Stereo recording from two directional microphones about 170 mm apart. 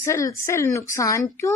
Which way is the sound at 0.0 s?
15° left (ahead or behind).